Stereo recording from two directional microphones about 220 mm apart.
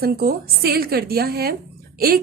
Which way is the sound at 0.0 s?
45° right (ahead or behind).